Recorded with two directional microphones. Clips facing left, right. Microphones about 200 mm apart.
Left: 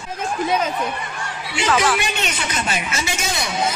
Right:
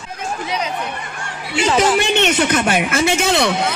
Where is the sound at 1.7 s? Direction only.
30° right (ahead or behind).